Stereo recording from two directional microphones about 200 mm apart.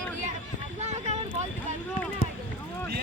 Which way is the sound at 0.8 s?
35° right (ahead or behind).